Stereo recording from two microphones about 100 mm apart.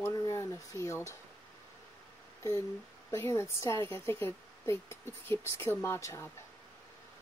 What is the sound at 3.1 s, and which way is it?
Speech, 30° left (ahead or behind).